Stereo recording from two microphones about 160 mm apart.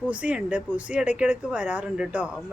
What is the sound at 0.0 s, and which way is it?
Speech, 10° right (ahead or behind).